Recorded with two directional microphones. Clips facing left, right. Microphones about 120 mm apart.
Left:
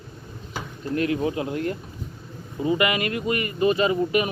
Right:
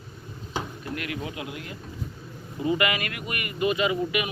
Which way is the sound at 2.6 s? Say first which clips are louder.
Left 3 dB; 25° left (ahead or behind).